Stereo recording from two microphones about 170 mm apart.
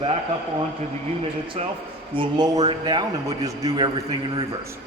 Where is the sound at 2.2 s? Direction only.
25° right (ahead or behind).